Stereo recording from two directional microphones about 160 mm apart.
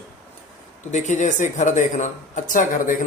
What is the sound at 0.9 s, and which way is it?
Speech, 50° left (ahead or behind).